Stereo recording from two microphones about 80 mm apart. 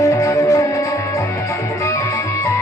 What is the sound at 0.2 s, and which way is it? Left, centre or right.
Music, left.